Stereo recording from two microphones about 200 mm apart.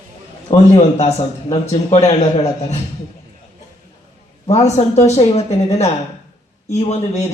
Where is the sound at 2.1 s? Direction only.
30° left (ahead or behind).